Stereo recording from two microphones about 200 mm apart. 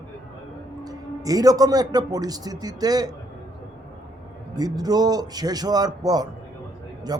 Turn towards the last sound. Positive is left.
turn(degrees=-20)  # may be behind; listen again after turning